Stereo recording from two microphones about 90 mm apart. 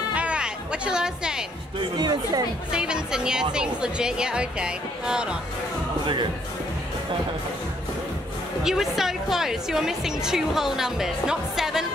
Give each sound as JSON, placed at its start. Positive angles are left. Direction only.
{"t": 0.1, "sound": "music", "side_deg": -15}
{"t": 2.0, "sound": "speech", "side_deg": -50}
{"t": 2.7, "sound": "speech", "side_deg": -10}
{"t": 8.6, "sound": "a woman's voice", "side_deg": -5}